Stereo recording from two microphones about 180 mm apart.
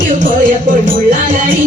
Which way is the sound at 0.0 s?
50° right (ahead or behind).